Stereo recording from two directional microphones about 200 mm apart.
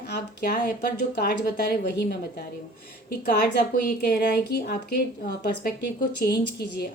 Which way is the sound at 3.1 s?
50° left (ahead or behind).